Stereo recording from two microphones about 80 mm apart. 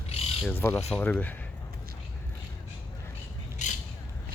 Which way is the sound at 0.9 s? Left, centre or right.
Centre.